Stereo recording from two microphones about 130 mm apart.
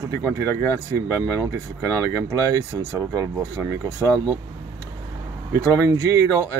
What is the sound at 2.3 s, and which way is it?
Speech, 25° right (ahead or behind).